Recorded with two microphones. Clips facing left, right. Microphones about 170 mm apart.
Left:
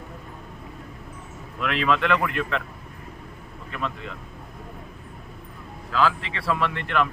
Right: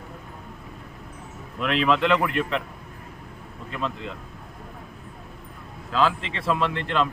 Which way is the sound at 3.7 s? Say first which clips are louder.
Right 1 dB; 20° right (ahead or behind).